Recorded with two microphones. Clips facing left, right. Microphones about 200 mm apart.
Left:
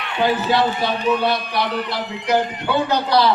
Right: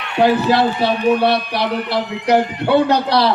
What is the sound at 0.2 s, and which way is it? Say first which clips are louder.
A man's voice: right 4 dB; 70° right (ahead or behind).